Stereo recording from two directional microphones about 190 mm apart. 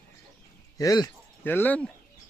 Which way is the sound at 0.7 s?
20° left (ahead or behind).